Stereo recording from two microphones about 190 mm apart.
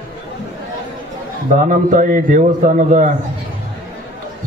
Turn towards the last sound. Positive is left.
turn(degrees=-45)  # may be behind; listen again after turning